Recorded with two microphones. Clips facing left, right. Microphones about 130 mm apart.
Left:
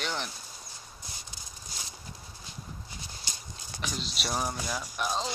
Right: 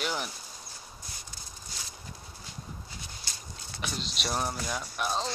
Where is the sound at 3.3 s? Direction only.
15° left (ahead or behind).